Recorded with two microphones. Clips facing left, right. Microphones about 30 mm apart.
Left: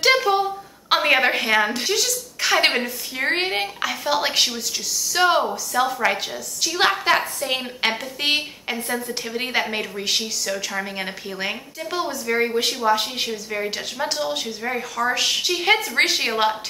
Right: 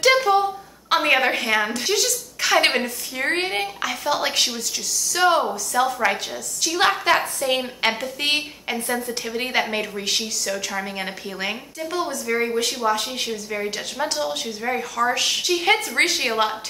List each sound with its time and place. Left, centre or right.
0.1 s a sound: centre
1.0 s speech: centre
1.9 s a woman's voice: centre
3.3 s speech: centre
5.4 s a woman's voice: centre
11.9 s speech: left